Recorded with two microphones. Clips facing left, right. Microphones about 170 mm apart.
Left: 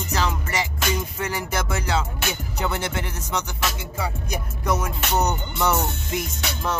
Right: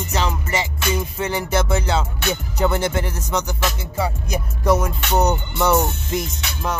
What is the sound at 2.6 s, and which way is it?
Music, 40° right (ahead or behind).